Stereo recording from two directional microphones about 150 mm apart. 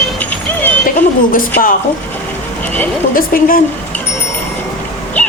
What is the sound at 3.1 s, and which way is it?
Speech, 70° left (ahead or behind).